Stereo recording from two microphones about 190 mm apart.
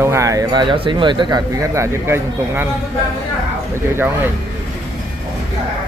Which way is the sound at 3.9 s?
10° right (ahead or behind).